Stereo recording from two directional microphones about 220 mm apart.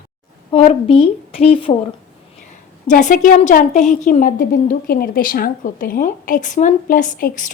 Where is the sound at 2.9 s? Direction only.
35° left (ahead or behind).